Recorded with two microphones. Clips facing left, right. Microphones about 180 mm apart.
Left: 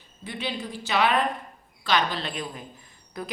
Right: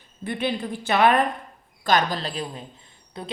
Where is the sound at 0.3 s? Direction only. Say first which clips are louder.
Right 6 dB; 55° right (ahead or behind).